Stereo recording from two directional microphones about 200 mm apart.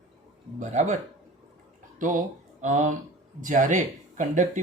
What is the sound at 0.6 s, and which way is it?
Speech, 35° right (ahead or behind).